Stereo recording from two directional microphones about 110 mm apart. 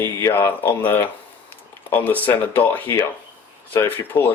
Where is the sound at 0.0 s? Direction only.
25° left (ahead or behind).